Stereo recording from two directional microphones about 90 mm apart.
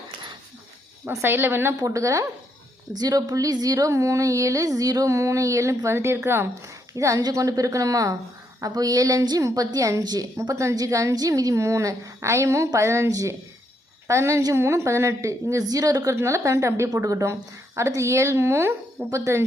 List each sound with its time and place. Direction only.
1.1 s a woman's voice: 25° right (ahead or behind)
1.8 s a woman's voice: 35° right (ahead or behind)
10.5 s speech: 35° right (ahead or behind)